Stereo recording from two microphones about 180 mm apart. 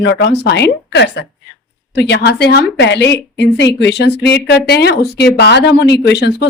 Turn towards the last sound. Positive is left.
turn(degrees=65)  # may be behind; listen again after turning